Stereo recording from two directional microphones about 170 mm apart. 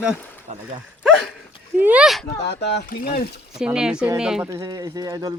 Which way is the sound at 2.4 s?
85° left.